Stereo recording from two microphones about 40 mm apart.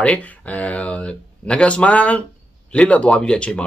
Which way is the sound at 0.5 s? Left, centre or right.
Left.